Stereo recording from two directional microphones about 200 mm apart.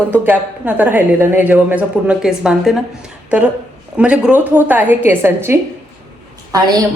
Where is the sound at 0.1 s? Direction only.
10° right (ahead or behind).